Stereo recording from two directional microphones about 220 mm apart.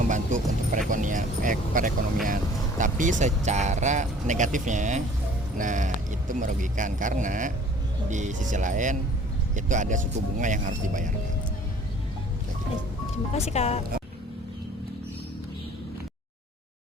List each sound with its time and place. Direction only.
0.1 s speech: 35° right (ahead or behind)
13.3 s speech: 30° left (ahead or behind)